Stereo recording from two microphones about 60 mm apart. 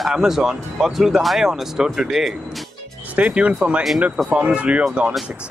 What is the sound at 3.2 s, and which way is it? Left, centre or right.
Speech, right.